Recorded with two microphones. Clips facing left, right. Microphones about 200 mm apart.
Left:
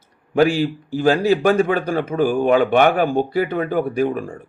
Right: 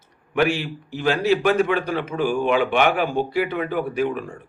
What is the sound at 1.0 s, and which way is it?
A man's voice, 45° left (ahead or behind).